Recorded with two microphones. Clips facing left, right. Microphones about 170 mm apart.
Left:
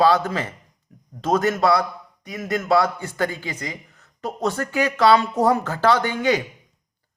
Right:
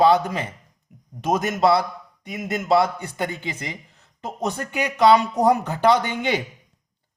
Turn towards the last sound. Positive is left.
turn(degrees=-20)  # may be behind; listen again after turning